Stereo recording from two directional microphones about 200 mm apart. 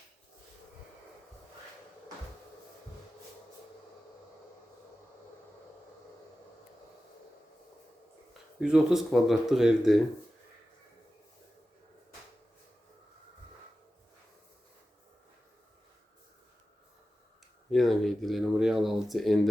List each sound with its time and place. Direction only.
8.3 s speech: centre (ahead or behind)
17.7 s speech: centre (ahead or behind)